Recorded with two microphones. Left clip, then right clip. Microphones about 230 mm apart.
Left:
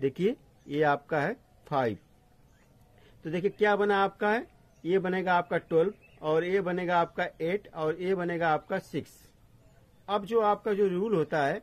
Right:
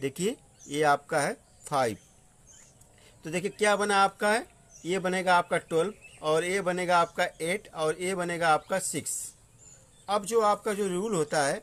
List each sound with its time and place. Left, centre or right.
0.0 s speech: centre
3.2 s speech: centre
10.0 s speech: centre